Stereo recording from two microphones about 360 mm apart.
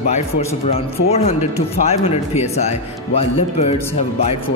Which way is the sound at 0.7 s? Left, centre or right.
Centre.